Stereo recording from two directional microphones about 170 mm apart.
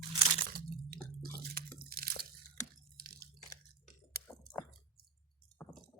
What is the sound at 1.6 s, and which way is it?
Crunch, 60° right (ahead or behind).